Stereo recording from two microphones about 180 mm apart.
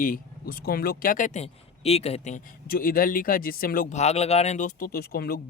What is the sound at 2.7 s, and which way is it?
Speech, 55° left (ahead or behind).